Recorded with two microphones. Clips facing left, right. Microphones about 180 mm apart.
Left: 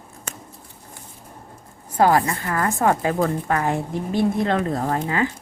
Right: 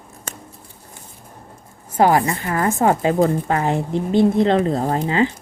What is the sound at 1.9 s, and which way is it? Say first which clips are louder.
A woman's voice: right 2 dB; 20° right (ahead or behind).